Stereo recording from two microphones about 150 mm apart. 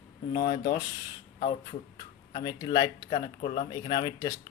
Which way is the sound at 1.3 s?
35° left (ahead or behind).